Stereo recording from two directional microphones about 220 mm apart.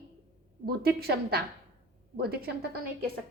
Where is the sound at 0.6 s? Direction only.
45° right (ahead or behind).